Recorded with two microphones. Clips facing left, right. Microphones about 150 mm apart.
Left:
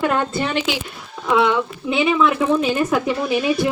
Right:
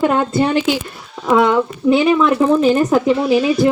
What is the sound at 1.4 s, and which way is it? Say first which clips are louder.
Speech: right 4 dB; 40° right (ahead or behind).